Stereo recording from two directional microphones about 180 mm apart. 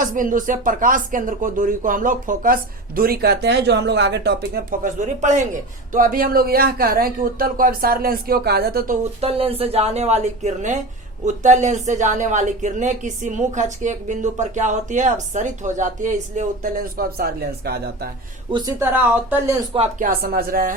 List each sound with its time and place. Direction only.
0.0 s a woman's voice: 50° right (ahead or behind)
9.2 s a woman's voice: 35° right (ahead or behind); by 18.1 s 60° right (ahead or behind)
18.8 s speech: 10° right (ahead or behind)
20.0 s a woman's voice: 55° right (ahead or behind)